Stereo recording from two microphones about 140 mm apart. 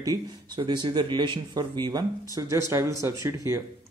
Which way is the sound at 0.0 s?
30° right (ahead or behind).